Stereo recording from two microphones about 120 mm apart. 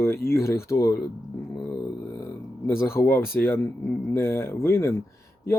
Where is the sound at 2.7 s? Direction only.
20° left (ahead or behind).